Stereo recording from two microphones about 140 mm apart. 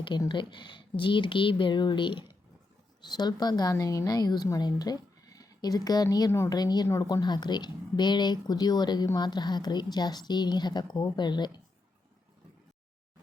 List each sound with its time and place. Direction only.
0.2 s a woman's voice: 35° left (ahead or behind)